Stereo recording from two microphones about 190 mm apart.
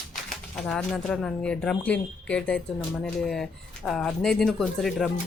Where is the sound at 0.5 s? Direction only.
Centre (ahead or behind).